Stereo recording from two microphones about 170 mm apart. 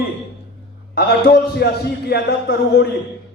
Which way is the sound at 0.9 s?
70° left (ahead or behind).